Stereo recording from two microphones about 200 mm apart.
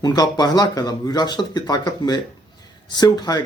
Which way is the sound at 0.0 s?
20° left (ahead or behind).